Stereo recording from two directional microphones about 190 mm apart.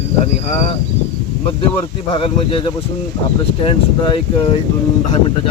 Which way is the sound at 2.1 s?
30° left (ahead or behind).